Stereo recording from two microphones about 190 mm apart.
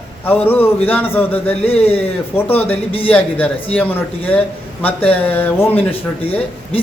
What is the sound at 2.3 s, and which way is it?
Speech, 10° left (ahead or behind).